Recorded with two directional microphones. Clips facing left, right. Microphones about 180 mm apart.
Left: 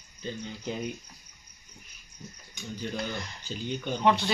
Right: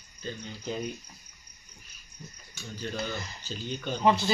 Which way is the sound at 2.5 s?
15° left (ahead or behind).